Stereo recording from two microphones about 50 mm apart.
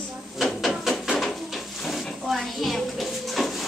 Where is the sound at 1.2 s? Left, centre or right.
Centre.